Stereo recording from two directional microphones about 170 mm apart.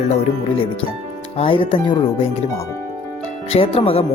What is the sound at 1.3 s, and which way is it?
Speech, 35° left (ahead or behind).